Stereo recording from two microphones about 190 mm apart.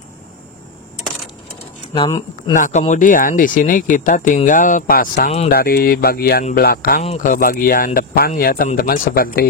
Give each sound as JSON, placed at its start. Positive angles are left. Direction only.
{"t": 2.0, "sound": "speech", "side_deg": 20}
{"t": 2.5, "sound": "speech", "side_deg": 45}
{"t": 7.0, "sound": "speech", "side_deg": 40}